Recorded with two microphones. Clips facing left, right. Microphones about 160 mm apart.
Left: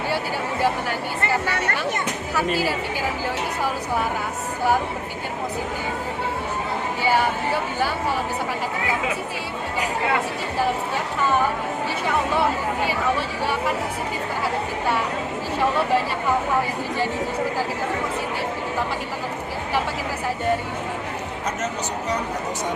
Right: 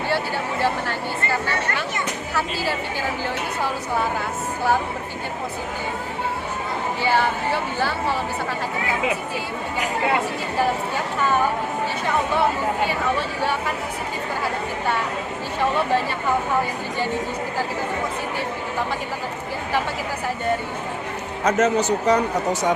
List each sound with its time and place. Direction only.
7.0 s speech: 10° left (ahead or behind)
21.4 s speech: 85° right